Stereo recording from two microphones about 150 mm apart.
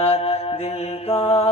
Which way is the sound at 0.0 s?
40° left (ahead or behind).